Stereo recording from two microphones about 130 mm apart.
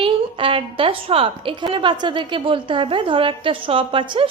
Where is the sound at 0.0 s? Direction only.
40° right (ahead or behind).